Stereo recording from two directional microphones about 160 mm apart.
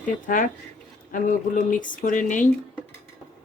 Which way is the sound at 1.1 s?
55° left (ahead or behind).